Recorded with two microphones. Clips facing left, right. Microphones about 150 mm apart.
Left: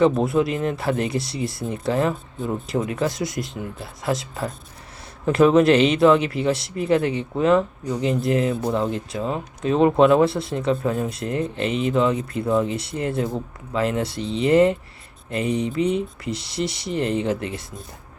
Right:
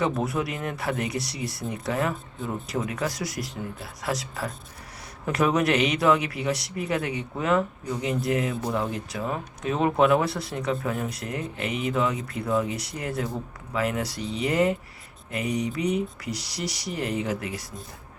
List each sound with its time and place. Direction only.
0.0 s speech: 25° left (ahead or behind)